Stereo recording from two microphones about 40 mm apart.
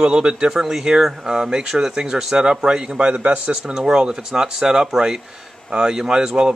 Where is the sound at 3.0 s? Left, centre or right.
Right.